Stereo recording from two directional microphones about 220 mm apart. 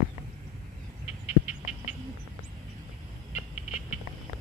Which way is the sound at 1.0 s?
30° left (ahead or behind).